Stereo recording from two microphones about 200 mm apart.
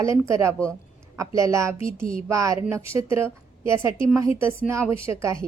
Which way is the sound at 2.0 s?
40° right (ahead or behind).